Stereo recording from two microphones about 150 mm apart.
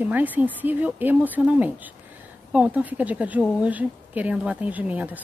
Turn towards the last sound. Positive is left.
turn(degrees=-10)  # may be behind; listen again after turning